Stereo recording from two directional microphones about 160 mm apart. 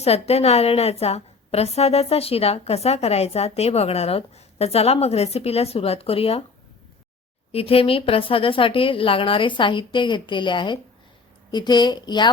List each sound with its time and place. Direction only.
0.0 s a woman's voice: 40° left (ahead or behind)
7.5 s a woman's voice: 35° left (ahead or behind)